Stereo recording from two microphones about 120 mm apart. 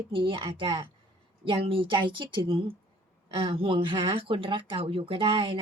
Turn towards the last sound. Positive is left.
turn(degrees=-45)  # may be behind; listen again after turning